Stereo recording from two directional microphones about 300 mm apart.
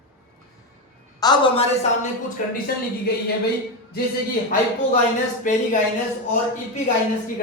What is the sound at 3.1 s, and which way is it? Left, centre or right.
Speech, left.